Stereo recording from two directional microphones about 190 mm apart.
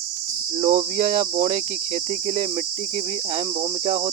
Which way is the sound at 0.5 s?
35° right (ahead or behind).